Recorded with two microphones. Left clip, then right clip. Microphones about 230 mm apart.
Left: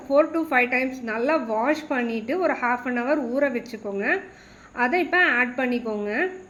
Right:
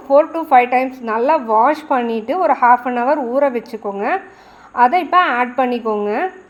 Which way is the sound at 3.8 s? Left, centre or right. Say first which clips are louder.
Right 5 dB; right.